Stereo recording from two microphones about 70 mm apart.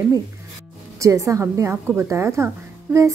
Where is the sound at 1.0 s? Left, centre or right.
Right.